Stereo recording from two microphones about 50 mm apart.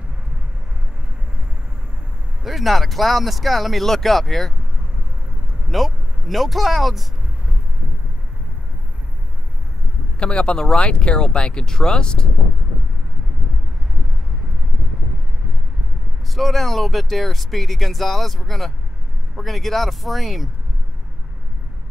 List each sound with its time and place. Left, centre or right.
2.4 s speech: centre
5.7 s speech: centre
10.1 s speech: left
16.3 s speech: centre